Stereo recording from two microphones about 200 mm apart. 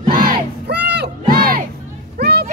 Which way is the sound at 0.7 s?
55° right (ahead or behind).